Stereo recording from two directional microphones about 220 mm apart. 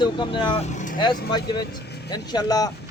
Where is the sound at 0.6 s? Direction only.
35° left (ahead or behind).